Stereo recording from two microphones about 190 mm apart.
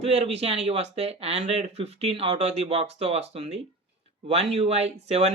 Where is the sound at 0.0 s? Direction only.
35° right (ahead or behind).